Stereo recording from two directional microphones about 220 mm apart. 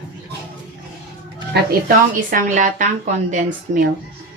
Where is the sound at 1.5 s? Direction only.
40° right (ahead or behind).